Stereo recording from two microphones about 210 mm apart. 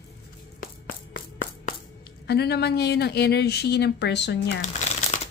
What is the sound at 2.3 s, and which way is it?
A woman's voice, 50° left (ahead or behind).